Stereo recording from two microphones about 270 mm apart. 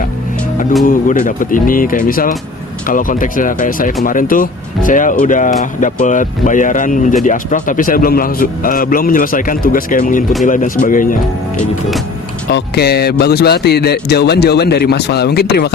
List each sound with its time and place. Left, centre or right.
0.9 s speech: left
12.5 s speech: left